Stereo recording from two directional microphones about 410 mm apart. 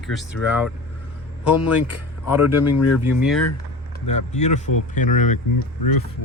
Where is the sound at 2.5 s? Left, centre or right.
Left.